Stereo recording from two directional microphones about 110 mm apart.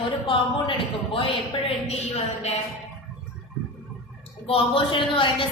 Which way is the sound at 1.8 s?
80° left.